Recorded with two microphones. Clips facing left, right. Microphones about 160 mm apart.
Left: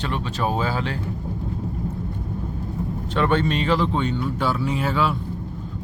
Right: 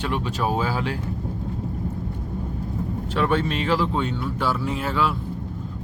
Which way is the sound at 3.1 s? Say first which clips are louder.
Left 2 dB; 5° right (ahead or behind).